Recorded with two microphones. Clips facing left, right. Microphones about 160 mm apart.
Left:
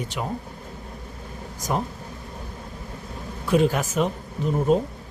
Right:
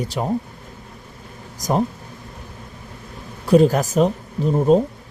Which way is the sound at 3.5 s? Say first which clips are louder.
Right 6 dB; 40° right (ahead or behind).